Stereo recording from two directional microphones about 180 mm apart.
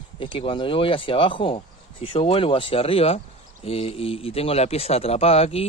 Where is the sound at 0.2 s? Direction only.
30° left (ahead or behind).